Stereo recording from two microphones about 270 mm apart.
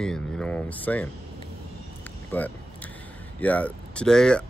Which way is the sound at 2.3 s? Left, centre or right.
Centre.